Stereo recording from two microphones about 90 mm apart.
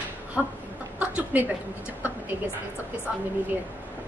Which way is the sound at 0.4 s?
Centre (ahead or behind).